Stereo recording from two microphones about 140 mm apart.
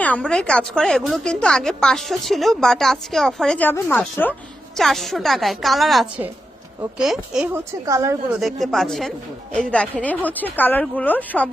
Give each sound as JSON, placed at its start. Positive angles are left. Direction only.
{"t": 0.0, "sound": "speech", "side_deg": 10}
{"t": 4.8, "sound": "speech", "side_deg": 0}
{"t": 7.5, "sound": "a woman's voice", "side_deg": -20}
{"t": 8.3, "sound": "a woman's voice", "side_deg": 0}